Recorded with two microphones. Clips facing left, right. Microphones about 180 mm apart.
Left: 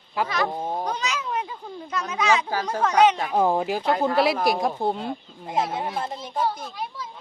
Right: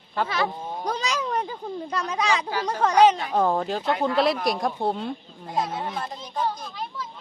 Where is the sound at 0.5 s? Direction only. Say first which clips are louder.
Left 5 dB; 35° left (ahead or behind).